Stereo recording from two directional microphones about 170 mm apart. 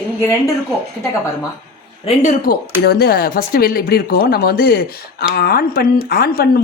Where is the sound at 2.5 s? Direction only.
65° left (ahead or behind).